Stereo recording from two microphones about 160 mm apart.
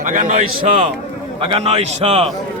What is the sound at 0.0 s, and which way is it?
Speech, 55° right (ahead or behind).